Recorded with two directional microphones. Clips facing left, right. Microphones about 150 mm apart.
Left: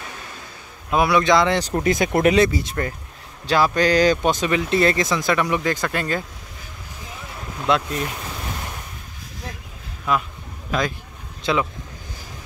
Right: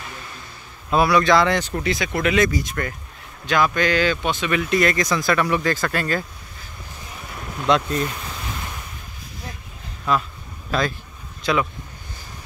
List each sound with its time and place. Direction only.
0.8 s speech: 20° left (ahead or behind)
1.6 s speech: 40° left (ahead or behind)
2.3 s speech: 30° left (ahead or behind)
4.5 s speech: 25° left (ahead or behind)
7.6 s speech: 5° left (ahead or behind)
10.1 s speech: 10° left (ahead or behind)
11.4 s speech: 25° left (ahead or behind)